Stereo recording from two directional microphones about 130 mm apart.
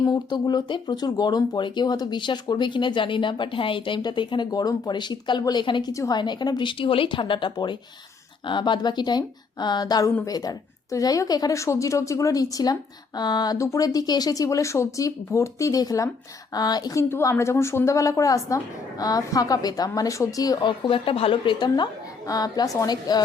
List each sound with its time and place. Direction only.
0.0 s a woman's voice: 30° left (ahead or behind)